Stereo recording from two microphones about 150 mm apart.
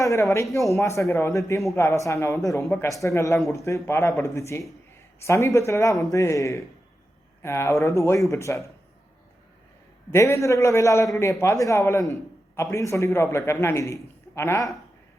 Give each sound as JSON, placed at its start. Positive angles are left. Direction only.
{"t": 0.0, "sound": "a man's voice", "side_deg": 20}
{"t": 10.1, "sound": "a man's voice", "side_deg": 15}